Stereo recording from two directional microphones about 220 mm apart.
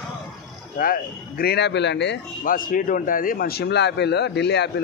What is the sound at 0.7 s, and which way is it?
Speech, 40° left (ahead or behind).